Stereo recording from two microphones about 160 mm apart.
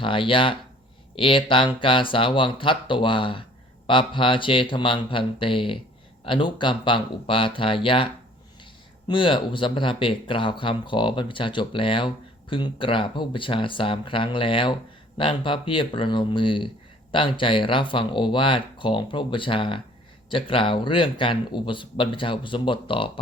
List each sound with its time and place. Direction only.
0.0 s speech: 35° left (ahead or behind)
9.0 s speech: 30° left (ahead or behind)